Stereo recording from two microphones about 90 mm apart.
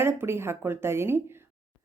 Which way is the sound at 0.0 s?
25° right (ahead or behind).